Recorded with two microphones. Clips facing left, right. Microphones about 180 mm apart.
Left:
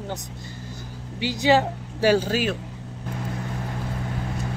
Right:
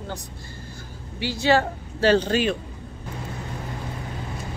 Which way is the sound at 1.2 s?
15° left (ahead or behind).